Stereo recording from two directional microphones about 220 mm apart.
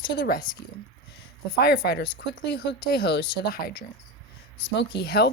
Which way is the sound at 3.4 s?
45° left (ahead or behind).